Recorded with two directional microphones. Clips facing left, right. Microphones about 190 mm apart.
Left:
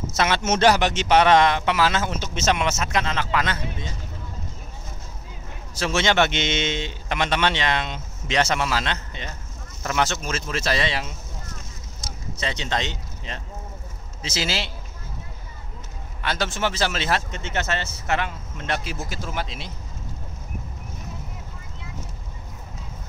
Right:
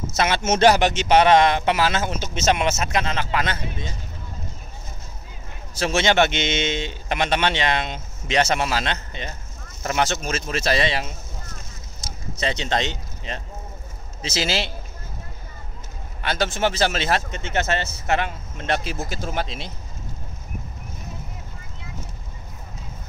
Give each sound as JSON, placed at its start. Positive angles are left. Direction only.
{"t": 0.4, "sound": "speech", "side_deg": -10}
{"t": 5.9, "sound": "speech", "side_deg": -15}
{"t": 12.4, "sound": "speech", "side_deg": -25}
{"t": 16.3, "sound": "speech", "side_deg": -50}
{"t": 17.0, "sound": "speech", "side_deg": -20}